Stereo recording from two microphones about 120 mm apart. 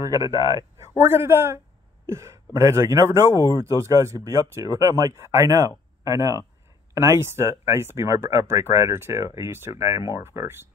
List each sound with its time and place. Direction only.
0.1 s speech: 30° right (ahead or behind)
0.9 s speech: 20° right (ahead or behind)